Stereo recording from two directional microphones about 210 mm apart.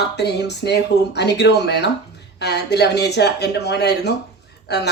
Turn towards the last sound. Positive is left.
turn(degrees=50)  # may be behind; listen again after turning